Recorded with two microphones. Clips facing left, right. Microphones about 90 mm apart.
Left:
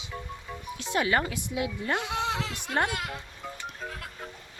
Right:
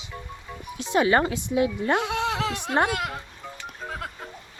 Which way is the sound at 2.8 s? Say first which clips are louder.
Right 5 dB; 60° right (ahead or behind).